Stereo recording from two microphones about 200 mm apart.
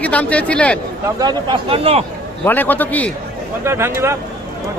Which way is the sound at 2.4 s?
10° left (ahead or behind).